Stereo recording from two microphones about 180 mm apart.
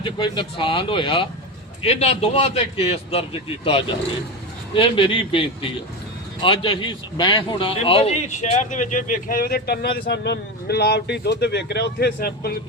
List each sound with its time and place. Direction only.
0.0 s a man's voice: 25° left (ahead or behind); by 12.5 s 60° left (ahead or behind)